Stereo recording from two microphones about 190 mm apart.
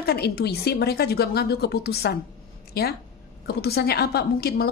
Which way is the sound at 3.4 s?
55° left (ahead or behind).